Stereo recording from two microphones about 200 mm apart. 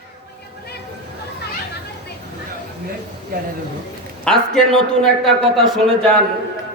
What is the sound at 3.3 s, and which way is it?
Speech, 50° right (ahead or behind).